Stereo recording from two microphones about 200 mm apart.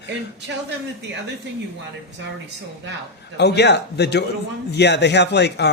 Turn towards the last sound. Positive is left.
turn(degrees=60)  # may be behind; listen again after turning